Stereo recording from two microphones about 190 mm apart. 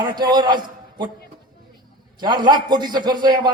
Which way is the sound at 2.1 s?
20° right (ahead or behind).